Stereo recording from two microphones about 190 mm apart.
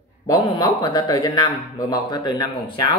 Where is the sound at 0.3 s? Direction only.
20° left (ahead or behind).